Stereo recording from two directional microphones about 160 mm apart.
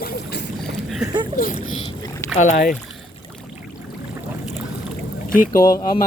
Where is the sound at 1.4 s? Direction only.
60° left (ahead or behind).